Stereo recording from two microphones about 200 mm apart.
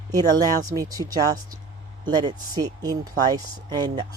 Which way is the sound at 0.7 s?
20° right (ahead or behind).